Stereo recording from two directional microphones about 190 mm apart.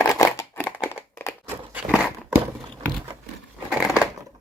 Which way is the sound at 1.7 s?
10° right (ahead or behind).